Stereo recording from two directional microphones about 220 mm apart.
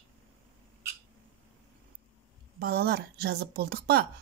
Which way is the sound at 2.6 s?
45° right (ahead or behind).